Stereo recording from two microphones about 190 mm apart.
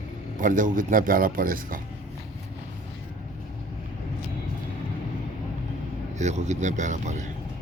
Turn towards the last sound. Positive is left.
turn(degrees=-40)  # may be behind; listen again after turning